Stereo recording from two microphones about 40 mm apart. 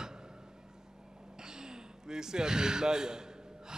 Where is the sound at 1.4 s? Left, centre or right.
Centre.